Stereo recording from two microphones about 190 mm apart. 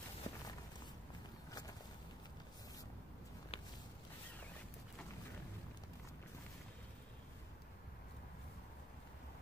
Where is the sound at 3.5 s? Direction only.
30° left (ahead or behind).